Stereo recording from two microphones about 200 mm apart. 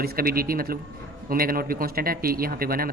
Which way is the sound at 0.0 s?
45° right (ahead or behind).